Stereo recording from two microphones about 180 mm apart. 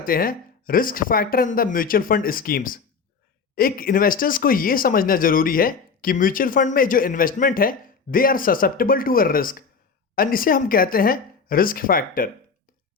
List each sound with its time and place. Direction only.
0.0 s speech: 50° left (ahead or behind)